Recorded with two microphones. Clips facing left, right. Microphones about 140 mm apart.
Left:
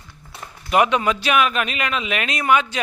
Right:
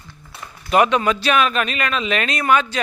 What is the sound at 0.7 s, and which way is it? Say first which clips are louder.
Speech: right 2 dB; 15° left (ahead or behind).